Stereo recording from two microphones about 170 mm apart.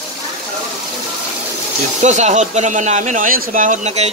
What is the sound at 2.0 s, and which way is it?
Speech, 40° right (ahead or behind).